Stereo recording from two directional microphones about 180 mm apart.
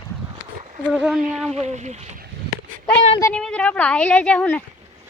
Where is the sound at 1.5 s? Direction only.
40° right (ahead or behind).